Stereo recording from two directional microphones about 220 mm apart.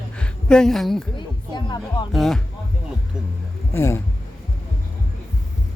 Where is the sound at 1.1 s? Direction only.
20° left (ahead or behind).